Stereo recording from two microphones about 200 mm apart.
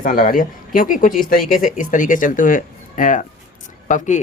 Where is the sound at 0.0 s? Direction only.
45° left (ahead or behind).